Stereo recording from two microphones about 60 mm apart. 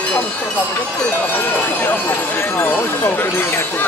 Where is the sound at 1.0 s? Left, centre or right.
Left.